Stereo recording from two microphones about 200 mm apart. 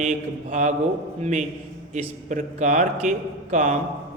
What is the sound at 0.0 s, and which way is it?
A man's voice, 35° right (ahead or behind).